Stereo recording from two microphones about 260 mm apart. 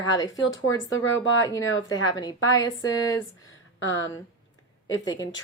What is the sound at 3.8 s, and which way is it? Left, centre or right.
Speech, left.